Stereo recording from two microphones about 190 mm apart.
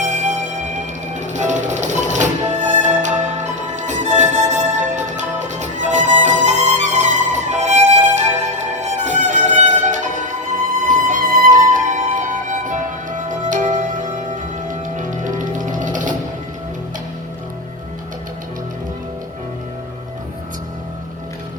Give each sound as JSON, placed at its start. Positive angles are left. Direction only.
{"t": 0.0, "sound": "music", "side_deg": -40}